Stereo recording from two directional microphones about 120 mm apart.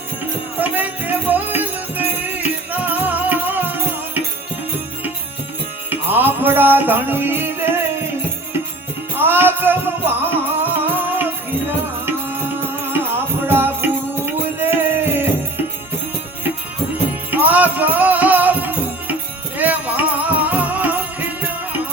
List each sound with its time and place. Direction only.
0.6 s music: 15° right (ahead or behind)
5.9 s music: 15° right (ahead or behind)
9.1 s music: 15° right (ahead or behind)
17.3 s music: 15° right (ahead or behind)